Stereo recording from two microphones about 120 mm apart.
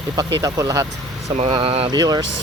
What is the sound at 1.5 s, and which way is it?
Speech, 55° right (ahead or behind).